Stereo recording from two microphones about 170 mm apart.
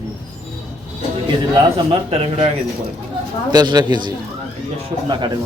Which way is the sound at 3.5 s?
25° right (ahead or behind).